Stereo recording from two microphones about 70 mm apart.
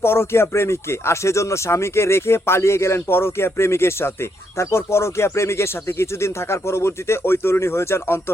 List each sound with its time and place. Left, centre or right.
0.0 s speech: left